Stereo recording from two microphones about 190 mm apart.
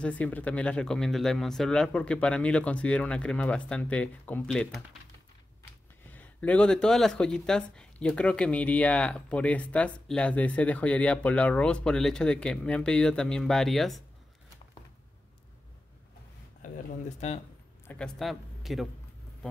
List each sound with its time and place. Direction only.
0.0 s speech: 5° left (ahead or behind)
6.1 s speech: 5° left (ahead or behind)
16.6 s speech: 40° left (ahead or behind)
17.8 s speech: 5° left (ahead or behind)